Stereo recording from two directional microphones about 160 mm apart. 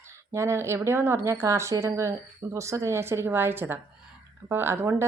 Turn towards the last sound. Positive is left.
turn(degrees=-15)  # may be behind; listen again after turning